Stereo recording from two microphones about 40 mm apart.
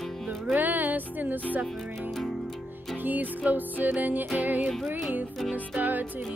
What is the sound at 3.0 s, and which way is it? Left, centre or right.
Music, right.